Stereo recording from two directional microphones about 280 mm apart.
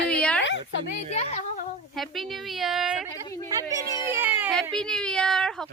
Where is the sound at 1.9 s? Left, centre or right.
Centre.